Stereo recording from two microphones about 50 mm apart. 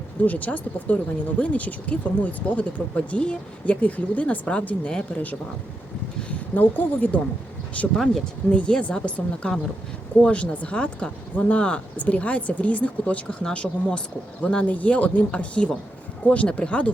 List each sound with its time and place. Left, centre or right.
0.3 s a woman's voice: left
6.5 s a woman's voice: left
7.9 s speech: centre
8.2 s speech: centre